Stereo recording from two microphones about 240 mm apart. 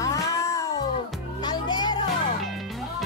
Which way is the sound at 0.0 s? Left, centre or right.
Centre.